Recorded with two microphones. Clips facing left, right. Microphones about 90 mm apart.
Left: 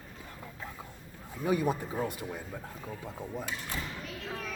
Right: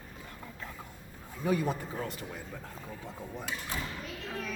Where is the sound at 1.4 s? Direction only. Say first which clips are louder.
Left 1 dB; 15° left (ahead or behind).